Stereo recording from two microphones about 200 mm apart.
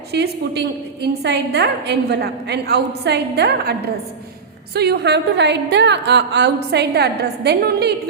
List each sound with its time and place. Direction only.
0.1 s a woman's voice: 55° right (ahead or behind)